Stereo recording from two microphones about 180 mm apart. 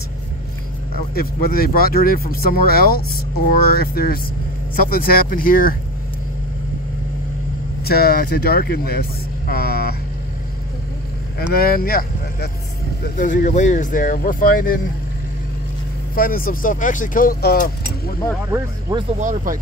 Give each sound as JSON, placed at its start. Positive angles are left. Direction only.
{"t": 1.1, "sound": "speech", "side_deg": 55}
{"t": 7.8, "sound": "speech", "side_deg": 60}
{"t": 9.5, "sound": "vehicle", "side_deg": 60}
{"t": 11.5, "sound": "speech", "side_deg": 55}
{"t": 16.2, "sound": "speech", "side_deg": 55}
{"t": 18.5, "sound": "speech", "side_deg": -20}
{"t": 19.1, "sound": "speech", "side_deg": -45}